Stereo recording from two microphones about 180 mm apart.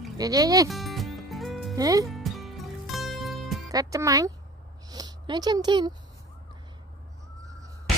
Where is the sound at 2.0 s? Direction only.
Centre (ahead or behind).